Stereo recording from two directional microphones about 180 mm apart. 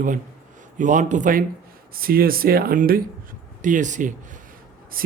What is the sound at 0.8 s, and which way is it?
A man's voice, 45° right (ahead or behind).